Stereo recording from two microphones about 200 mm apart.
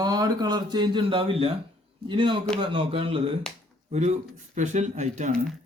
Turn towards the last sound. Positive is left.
turn(degrees=-35)  # may be behind; listen again after turning